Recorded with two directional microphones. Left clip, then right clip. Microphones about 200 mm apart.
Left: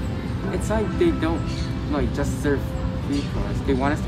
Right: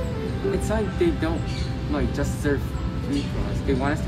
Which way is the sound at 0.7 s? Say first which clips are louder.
Left 5 dB; 15° left (ahead or behind).